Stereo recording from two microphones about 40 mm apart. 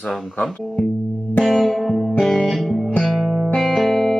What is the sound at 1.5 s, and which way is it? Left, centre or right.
Music, centre.